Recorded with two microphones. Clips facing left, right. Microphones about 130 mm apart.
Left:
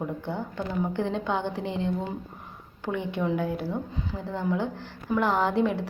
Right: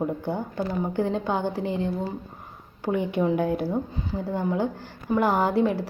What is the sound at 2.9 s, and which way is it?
Speech, 10° right (ahead or behind).